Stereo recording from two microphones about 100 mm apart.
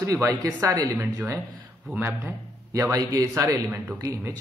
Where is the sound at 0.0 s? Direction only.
30° right (ahead or behind).